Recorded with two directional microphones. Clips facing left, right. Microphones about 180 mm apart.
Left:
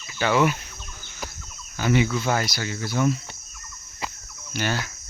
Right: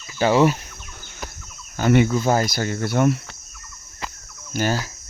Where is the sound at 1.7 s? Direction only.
50° right (ahead or behind).